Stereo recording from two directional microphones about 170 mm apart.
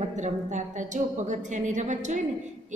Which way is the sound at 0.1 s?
45° right (ahead or behind).